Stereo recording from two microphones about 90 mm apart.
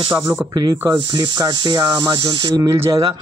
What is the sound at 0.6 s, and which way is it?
Speech, 40° right (ahead or behind).